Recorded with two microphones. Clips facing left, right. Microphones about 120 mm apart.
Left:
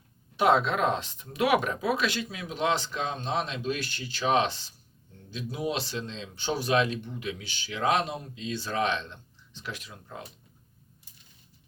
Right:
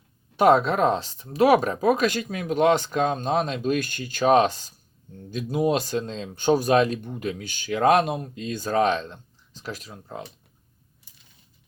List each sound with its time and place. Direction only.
0.3 s speech: 45° right (ahead or behind)